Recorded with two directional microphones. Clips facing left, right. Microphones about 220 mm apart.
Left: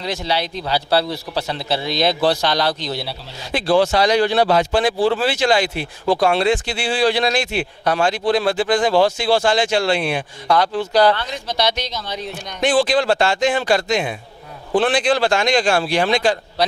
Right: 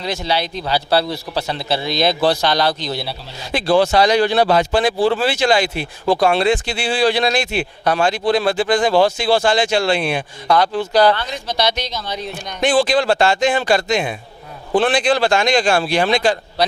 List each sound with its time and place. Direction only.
0.0 s a man's voice: 10° right (ahead or behind)
8.9 s speech: 35° right (ahead or behind)
9.1 s a man's voice: 10° right (ahead or behind)